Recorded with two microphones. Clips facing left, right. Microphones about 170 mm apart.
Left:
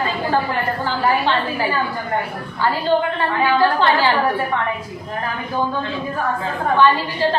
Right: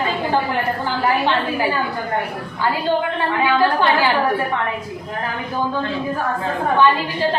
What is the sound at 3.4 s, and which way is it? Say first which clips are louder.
Speech: left 1 dB; 10° right (ahead or behind).